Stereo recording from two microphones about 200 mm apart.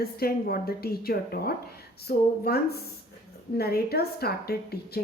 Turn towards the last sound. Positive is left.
turn(degrees=50)  # may be behind; listen again after turning